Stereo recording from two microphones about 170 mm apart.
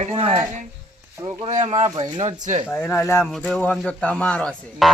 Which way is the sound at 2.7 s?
15° left (ahead or behind).